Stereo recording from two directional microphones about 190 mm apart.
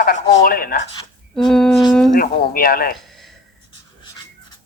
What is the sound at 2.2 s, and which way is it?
Speech, 50° left (ahead or behind).